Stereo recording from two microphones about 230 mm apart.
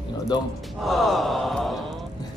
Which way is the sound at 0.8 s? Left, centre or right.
Centre.